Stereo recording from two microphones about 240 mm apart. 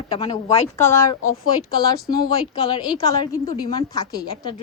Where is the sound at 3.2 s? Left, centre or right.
Centre.